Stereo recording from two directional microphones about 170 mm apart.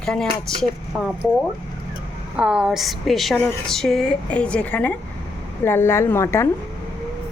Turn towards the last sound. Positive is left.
turn(degrees=15)  # may be behind; listen again after turning